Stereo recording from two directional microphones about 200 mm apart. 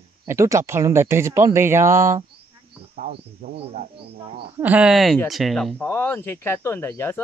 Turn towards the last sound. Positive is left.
turn(degrees=10)  # may be behind; listen again after turning